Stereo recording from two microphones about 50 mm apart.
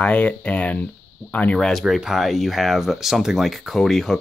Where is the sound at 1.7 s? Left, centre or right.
Centre.